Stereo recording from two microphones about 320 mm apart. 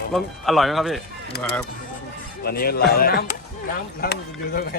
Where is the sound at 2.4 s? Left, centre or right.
Left.